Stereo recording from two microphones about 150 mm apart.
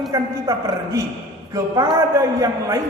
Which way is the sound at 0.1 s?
20° right (ahead or behind).